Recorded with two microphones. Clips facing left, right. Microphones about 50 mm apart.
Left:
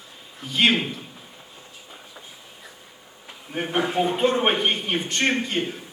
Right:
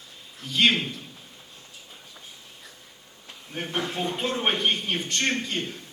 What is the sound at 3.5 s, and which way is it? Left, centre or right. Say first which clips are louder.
Speech: left 6 dB; centre.